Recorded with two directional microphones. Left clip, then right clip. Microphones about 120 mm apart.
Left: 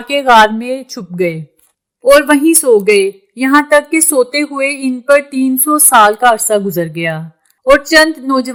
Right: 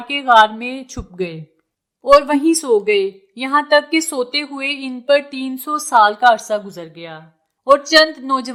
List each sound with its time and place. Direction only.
0.1 s a woman's voice: 35° left (ahead or behind)
1.1 s a sound: 30° left (ahead or behind)
2.5 s a woman's voice: 30° left (ahead or behind)
5.0 s a sound: 30° left (ahead or behind)
5.5 s a woman's voice: 25° left (ahead or behind); by 7.3 s 60° left (ahead or behind)
7.6 s a woman's voice: 35° left (ahead or behind)